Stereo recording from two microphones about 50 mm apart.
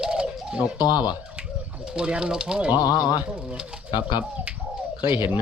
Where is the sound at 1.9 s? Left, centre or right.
Centre.